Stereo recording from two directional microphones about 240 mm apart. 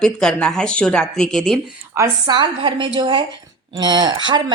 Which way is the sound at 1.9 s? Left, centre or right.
Centre.